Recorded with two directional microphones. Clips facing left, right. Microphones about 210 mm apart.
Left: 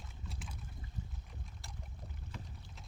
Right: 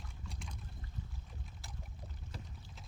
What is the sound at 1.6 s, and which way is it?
Boat, centre (ahead or behind).